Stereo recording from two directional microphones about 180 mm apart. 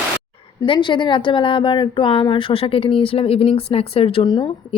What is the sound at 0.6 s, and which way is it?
A woman's voice, 25° left (ahead or behind).